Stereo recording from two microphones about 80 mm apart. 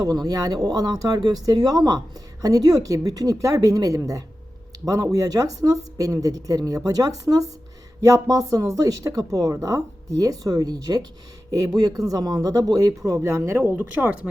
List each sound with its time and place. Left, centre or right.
0.0 s speech: right